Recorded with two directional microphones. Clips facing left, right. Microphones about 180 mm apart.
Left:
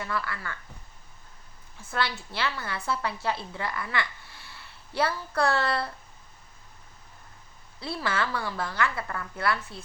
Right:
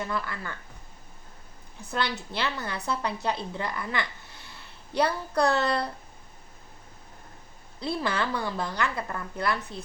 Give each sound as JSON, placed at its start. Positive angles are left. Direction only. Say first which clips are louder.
{"t": 0.0, "sound": "a woman's voice", "louder": "right 1 dB", "side_deg": -20}
{"t": 1.9, "sound": "a woman's voice", "louder": "right 1 dB", "side_deg": -20}
{"t": 7.8, "sound": "a woman's voice", "louder": "right 2 dB", "side_deg": -20}